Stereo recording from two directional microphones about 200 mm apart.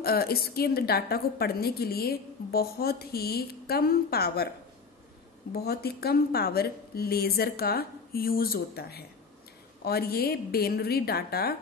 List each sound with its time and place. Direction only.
0.0 s a woman's voice: 50° left (ahead or behind)
5.5 s a woman's voice: 50° left (ahead or behind)